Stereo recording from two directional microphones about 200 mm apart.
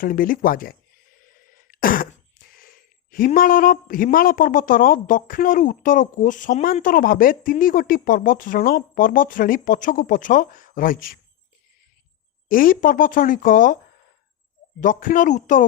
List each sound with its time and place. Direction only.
0.0 s speech: 45° left (ahead or behind)
1.3 s throat clearing: 45° left (ahead or behind)
2.5 s speech: 45° left (ahead or behind)
12.5 s speech: 45° left (ahead or behind)
14.8 s speech: 40° left (ahead or behind)